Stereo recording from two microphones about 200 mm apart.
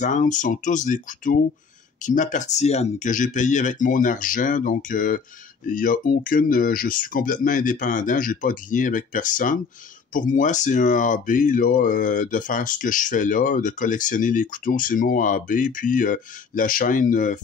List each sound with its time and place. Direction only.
0.0 s speech: 40° left (ahead or behind)